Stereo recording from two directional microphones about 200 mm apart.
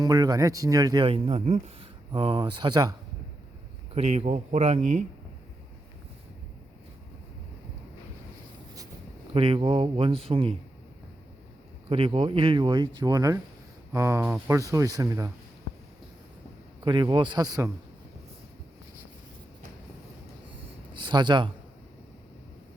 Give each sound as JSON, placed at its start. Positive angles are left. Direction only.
{"t": 0.0, "sound": "speech", "side_deg": -20}
{"t": 3.9, "sound": "speech", "side_deg": -35}
{"t": 9.3, "sound": "speech", "side_deg": -30}
{"t": 11.9, "sound": "speech", "side_deg": -30}
{"t": 16.8, "sound": "speech", "side_deg": -25}
{"t": 20.9, "sound": "speech", "side_deg": -25}